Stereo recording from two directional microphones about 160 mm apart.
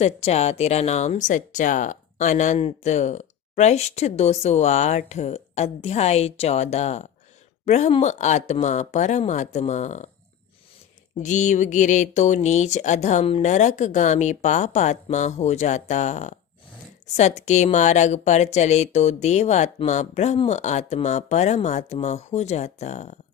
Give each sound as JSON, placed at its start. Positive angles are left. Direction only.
{"t": 0.0, "sound": "speech", "side_deg": 40}
{"t": 11.2, "sound": "speech", "side_deg": 50}